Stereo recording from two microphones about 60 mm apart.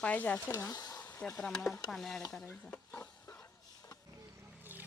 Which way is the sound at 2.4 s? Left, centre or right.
Left.